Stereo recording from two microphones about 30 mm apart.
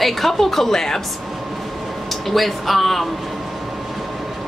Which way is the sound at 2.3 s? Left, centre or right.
Centre.